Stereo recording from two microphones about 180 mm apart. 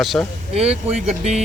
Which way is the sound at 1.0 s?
35° right (ahead or behind).